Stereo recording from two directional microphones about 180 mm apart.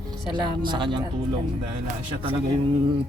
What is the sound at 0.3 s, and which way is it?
Speech, 25° right (ahead or behind).